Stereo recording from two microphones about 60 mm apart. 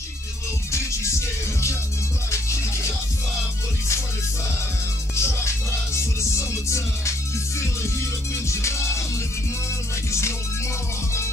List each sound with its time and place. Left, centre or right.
0.7 s music: left
2.3 s music: left
5.1 s music: left
8.5 s music: left